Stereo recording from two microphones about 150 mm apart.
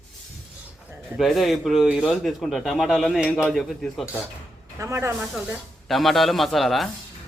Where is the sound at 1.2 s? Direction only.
Centre (ahead or behind).